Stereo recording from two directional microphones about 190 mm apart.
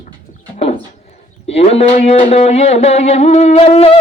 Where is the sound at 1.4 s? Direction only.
30° left (ahead or behind).